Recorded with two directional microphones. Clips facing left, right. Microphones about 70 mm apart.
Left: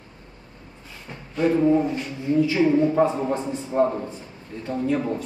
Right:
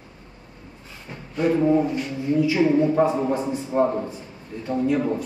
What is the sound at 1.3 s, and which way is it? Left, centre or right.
A man's voice, right.